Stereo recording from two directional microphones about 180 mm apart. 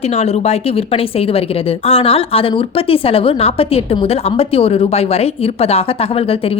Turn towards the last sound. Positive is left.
turn(degrees=35)  # may be behind; listen again after turning